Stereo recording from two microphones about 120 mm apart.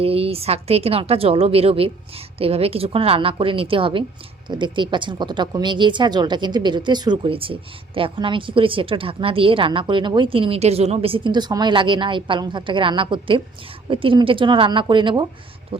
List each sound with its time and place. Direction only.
0.0 s speech: 55° right (ahead or behind)